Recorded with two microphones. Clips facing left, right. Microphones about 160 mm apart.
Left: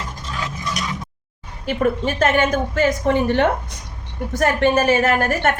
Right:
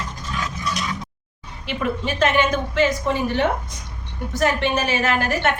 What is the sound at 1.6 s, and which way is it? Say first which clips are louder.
A woman's voice: left 5 dB; 45° left (ahead or behind).